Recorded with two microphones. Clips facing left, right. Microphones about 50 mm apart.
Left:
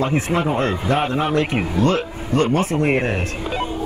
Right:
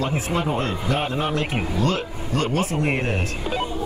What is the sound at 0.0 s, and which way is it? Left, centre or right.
A man's voice, left.